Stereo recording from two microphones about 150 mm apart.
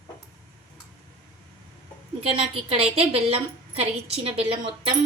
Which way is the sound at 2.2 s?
40° right (ahead or behind).